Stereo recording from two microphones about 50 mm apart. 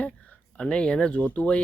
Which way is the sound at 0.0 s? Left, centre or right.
Left.